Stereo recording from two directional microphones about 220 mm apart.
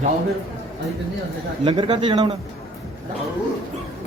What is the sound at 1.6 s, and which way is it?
Speech, 20° right (ahead or behind).